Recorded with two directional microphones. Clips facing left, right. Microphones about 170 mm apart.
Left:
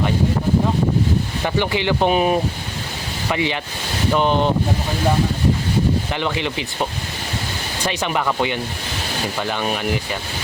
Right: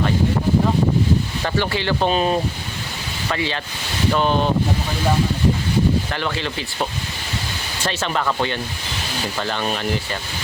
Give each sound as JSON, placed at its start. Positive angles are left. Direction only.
{"t": 1.5, "sound": "speech", "side_deg": 15}
{"t": 6.1, "sound": "speech", "side_deg": 15}
{"t": 7.9, "sound": "speech", "side_deg": 15}